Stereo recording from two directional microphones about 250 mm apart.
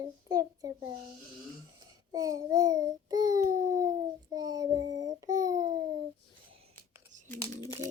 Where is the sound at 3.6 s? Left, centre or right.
Right.